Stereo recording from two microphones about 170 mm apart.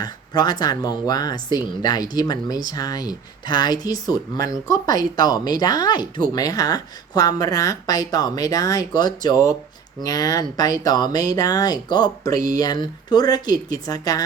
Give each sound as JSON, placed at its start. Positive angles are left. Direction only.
{"t": 0.0, "sound": "speech", "side_deg": 25}